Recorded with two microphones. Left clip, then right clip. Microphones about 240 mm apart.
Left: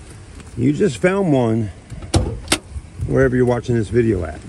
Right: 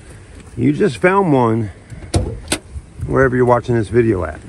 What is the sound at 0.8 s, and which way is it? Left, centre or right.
Vehicle, centre.